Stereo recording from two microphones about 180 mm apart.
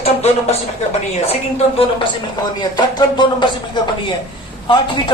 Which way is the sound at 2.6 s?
25° left (ahead or behind).